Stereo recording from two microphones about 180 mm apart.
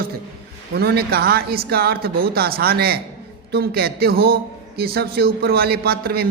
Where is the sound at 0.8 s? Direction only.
60° right (ahead or behind).